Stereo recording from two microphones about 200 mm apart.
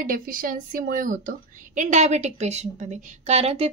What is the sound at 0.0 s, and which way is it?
A woman's voice, 45° right (ahead or behind).